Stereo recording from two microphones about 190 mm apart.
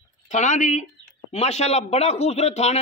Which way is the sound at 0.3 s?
40° left (ahead or behind).